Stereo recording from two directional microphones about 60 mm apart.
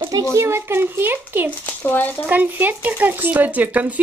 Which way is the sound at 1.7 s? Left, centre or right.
Left.